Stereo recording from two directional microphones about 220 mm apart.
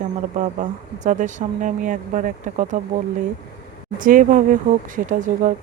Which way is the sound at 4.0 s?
35° right (ahead or behind).